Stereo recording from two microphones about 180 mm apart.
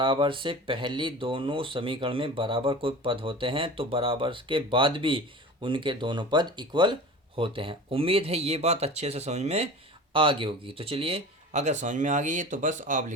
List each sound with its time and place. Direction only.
0.0 s speech: 30° right (ahead or behind); by 13.1 s 45° right (ahead or behind)